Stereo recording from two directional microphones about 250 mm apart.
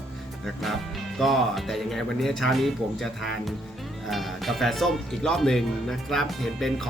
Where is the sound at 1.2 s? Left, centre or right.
Centre.